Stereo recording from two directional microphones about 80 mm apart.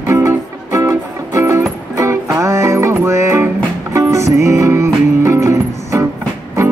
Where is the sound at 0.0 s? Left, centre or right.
Right.